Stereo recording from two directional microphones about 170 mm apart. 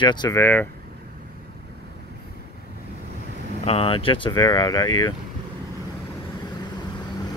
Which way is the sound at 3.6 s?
35° left (ahead or behind).